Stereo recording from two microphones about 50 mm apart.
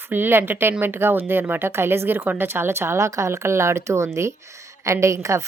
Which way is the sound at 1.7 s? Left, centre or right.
Right.